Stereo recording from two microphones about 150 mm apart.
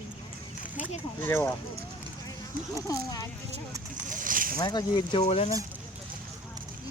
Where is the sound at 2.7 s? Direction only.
20° left (ahead or behind).